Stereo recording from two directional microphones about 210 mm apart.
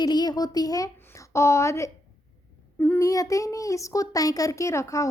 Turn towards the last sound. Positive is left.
turn(degrees=15)  # may be behind; listen again after turning